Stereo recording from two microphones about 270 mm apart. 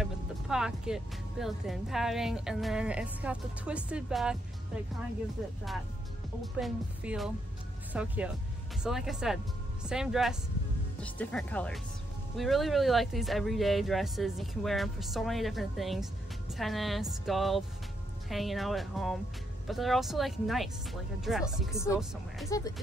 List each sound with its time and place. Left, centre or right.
0.0 s speech: centre
6.4 s speech: centre
22.5 s speech: centre